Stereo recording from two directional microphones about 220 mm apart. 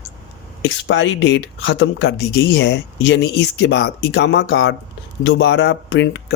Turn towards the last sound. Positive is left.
turn(degrees=50)  # may be behind; listen again after turning